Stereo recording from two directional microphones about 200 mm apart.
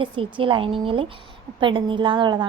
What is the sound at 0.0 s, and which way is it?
A woman's voice, 25° right (ahead or behind).